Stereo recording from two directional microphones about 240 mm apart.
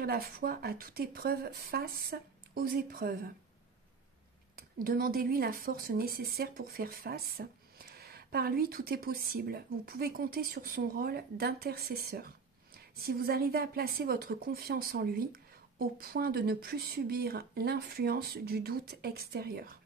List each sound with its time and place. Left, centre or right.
0.0 s speech: right
4.6 s speech: right